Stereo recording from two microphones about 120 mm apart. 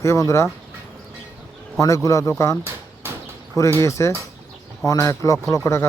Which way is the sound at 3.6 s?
25° left (ahead or behind).